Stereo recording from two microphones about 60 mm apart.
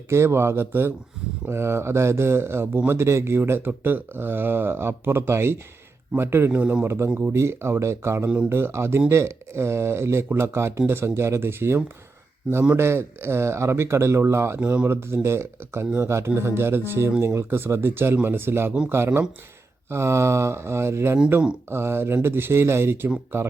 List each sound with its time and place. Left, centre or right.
0.1 s speech: right
7.1 s speech: right
7.3 s speech: right
14.6 s speech: right
14.8 s speech: right